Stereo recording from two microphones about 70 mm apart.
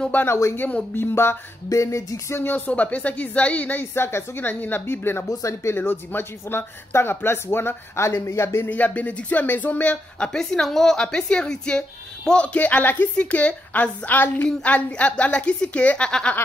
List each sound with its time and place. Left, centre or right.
0.1 s speech: left
1.7 s music: left
2.5 s a woman's voice: left
3.9 s speech: left
5.3 s speech: left
8.6 s a woman's voice: left